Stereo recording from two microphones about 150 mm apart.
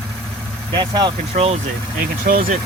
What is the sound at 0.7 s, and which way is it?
Speech, 30° right (ahead or behind).